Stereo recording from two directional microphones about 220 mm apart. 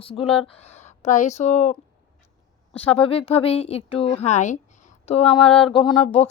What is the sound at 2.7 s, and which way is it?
Speech, 25° left (ahead or behind).